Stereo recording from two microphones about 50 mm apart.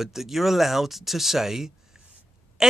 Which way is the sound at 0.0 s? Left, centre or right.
Centre.